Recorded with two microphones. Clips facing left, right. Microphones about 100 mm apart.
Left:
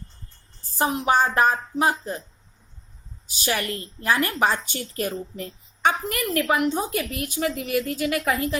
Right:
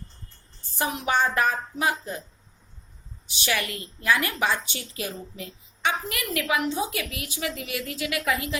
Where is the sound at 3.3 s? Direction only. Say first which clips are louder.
Left 2 dB; 40° left (ahead or behind).